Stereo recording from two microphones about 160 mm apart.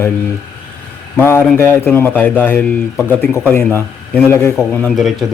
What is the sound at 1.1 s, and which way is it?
Speech, 15° left (ahead or behind).